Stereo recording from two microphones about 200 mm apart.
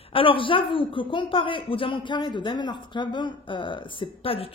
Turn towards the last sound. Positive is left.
turn(degrees=30)  # may be behind; listen again after turning